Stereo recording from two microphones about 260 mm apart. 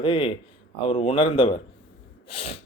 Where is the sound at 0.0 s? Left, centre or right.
Centre.